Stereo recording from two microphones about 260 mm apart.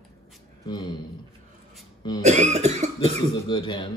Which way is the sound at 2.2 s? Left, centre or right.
Right.